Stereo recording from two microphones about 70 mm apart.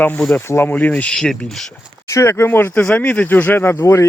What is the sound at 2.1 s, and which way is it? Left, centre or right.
Speech, left.